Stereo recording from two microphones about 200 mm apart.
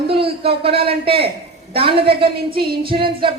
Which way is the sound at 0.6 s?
30° right (ahead or behind).